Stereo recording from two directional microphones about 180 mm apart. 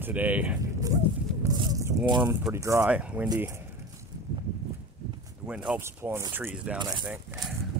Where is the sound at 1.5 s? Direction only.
20° right (ahead or behind).